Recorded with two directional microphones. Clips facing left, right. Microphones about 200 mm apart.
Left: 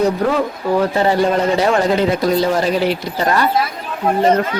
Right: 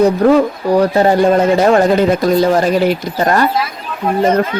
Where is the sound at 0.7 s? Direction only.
40° right (ahead or behind).